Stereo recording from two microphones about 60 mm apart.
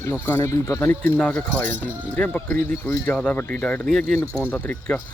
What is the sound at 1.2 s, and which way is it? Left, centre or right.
Speech, centre.